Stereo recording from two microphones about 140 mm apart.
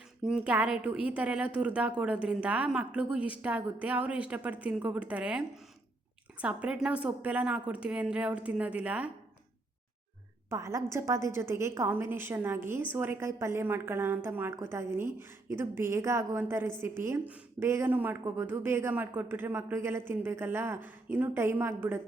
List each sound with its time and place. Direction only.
0.2 s a woman's voice: 5° right (ahead or behind)
6.4 s a woman's voice: 10° right (ahead or behind)
10.5 s a woman's voice: 20° right (ahead or behind)